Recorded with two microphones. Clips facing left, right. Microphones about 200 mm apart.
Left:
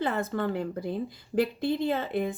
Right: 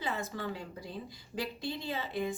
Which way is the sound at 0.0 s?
55° left (ahead or behind).